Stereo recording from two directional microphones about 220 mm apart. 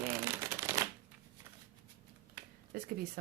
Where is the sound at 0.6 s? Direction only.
15° right (ahead or behind).